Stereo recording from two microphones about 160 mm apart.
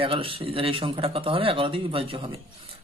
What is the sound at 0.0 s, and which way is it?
Speech, 35° right (ahead or behind).